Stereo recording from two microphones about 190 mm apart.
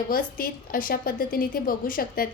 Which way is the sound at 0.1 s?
50° left (ahead or behind).